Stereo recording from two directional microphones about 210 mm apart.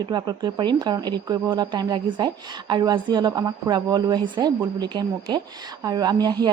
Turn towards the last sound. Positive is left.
turn(degrees=-20)  # may be behind; listen again after turning